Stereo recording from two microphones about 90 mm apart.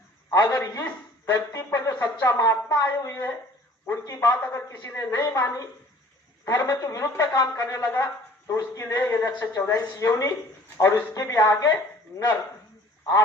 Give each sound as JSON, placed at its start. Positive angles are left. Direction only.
{"t": 0.5, "sound": "speech", "side_deg": 35}
{"t": 1.3, "sound": "a sound", "side_deg": 35}
{"t": 3.8, "sound": "speech", "side_deg": 35}
{"t": 9.5, "sound": "speech", "side_deg": 40}